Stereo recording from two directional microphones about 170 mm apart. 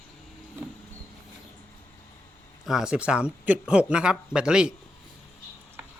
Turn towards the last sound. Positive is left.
turn(degrees=-5)  # may be behind; listen again after turning